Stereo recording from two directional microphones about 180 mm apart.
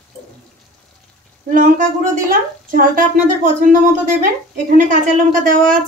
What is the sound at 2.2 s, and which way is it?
A woman's voice, 45° right (ahead or behind).